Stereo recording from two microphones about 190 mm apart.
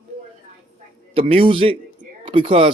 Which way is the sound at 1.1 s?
30° right (ahead or behind).